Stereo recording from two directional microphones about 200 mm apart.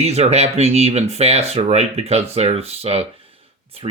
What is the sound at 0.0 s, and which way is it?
Speech, 30° right (ahead or behind).